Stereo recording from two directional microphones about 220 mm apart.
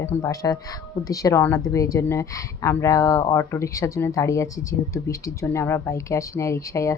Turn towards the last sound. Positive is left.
turn(degrees=15)  # may be behind; listen again after turning